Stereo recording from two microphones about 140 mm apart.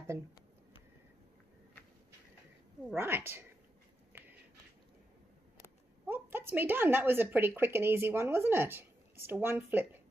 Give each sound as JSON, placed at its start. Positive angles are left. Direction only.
{"t": 3.0, "sound": "a woman's voice", "side_deg": -15}
{"t": 4.1, "sound": "a sound", "side_deg": -15}
{"t": 6.0, "sound": "speech", "side_deg": -15}